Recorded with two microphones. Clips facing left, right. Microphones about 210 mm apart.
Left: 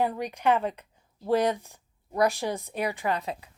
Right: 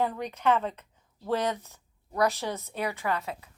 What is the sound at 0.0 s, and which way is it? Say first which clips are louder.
A woman's voice: left 1 dB; 10° left (ahead or behind).